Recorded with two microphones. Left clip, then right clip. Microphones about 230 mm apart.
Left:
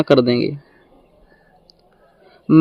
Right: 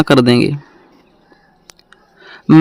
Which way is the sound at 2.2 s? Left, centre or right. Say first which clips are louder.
Right 5 dB; right.